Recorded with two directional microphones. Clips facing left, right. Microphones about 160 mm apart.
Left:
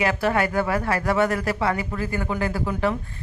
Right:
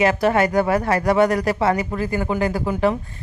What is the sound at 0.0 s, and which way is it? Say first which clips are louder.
Speech: right 5 dB; 20° right (ahead or behind).